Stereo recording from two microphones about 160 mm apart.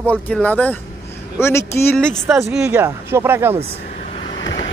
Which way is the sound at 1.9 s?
5° left (ahead or behind).